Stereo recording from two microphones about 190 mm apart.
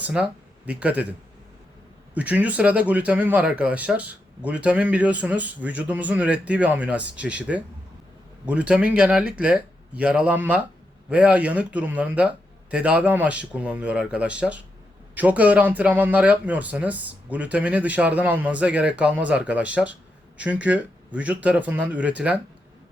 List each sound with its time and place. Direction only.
0.0 s speech: 5° right (ahead or behind)
2.1 s speech: 10° right (ahead or behind)